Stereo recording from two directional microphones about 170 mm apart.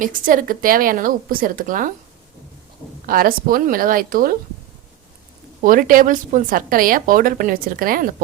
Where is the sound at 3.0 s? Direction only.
60° right (ahead or behind).